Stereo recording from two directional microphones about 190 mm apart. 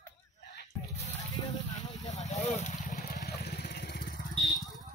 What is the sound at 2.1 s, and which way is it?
Speech, 35° left (ahead or behind).